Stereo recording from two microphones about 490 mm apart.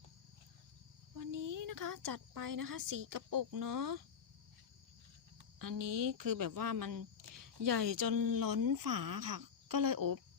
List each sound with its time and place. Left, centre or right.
1.1 s a woman's voice: right
5.5 s speech: right